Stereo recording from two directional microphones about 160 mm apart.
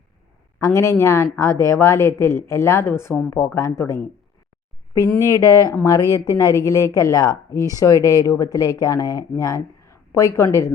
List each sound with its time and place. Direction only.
0.6 s speech: 20° left (ahead or behind)